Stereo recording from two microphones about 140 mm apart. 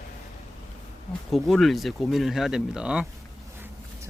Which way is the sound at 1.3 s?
Centre (ahead or behind).